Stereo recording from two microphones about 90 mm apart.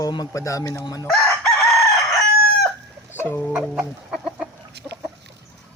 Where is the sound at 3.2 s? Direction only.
25° left (ahead or behind).